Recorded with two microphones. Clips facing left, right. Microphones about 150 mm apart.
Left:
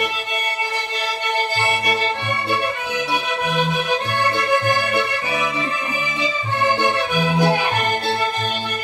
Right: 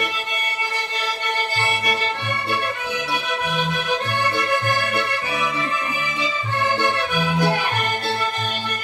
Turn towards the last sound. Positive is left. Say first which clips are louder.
# left 3 dB
turn(degrees=15)  # may be behind; listen again after turning